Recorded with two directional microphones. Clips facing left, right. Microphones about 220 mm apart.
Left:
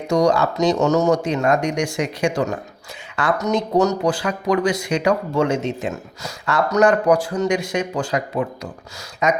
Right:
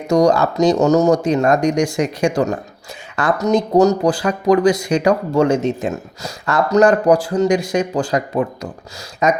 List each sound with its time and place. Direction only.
0.1 s speech: 40° right (ahead or behind)
6.7 s speech: 30° right (ahead or behind)